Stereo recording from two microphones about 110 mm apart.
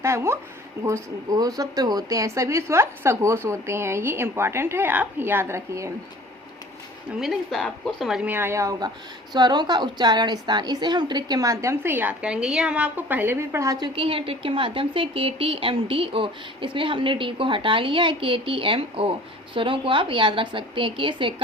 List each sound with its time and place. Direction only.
0.0 s a woman's voice: 25° right (ahead or behind)
1.3 s a woman's voice: 35° right (ahead or behind)
7.2 s a woman's voice: centre (ahead or behind)
8.3 s a woman's voice: 20° right (ahead or behind)
9.3 s a woman's voice: 40° right (ahead or behind); by 13.7 s 25° right (ahead or behind)
13.7 s speech: 45° right (ahead or behind)